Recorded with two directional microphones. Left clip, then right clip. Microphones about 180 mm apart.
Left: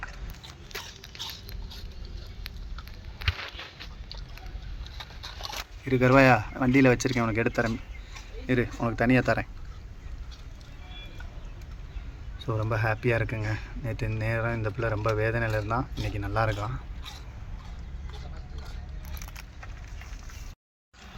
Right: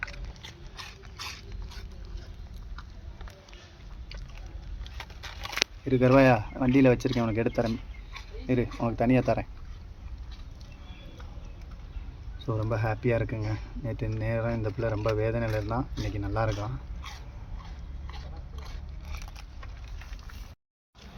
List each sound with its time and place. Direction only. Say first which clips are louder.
5.8 s speech: left 1 dB; centre (ahead or behind)
12.4 s speech: left 2 dB; 5° left (ahead or behind)